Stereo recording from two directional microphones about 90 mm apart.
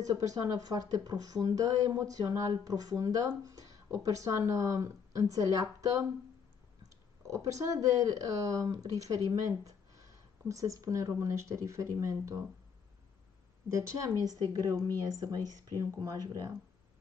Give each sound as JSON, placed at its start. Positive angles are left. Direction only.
{"t": 0.0, "sound": "speech", "side_deg": -40}
{"t": 7.2, "sound": "speech", "side_deg": -35}
{"t": 13.7, "sound": "a woman's voice", "side_deg": -35}